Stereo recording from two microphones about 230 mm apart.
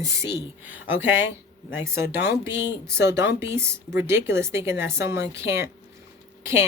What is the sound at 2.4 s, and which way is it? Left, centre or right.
Speech, centre.